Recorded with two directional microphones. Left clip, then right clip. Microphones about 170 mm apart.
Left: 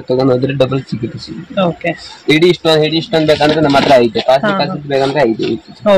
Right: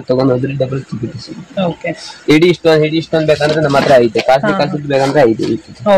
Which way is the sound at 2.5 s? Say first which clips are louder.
Right 1 dB; 10° right (ahead or behind).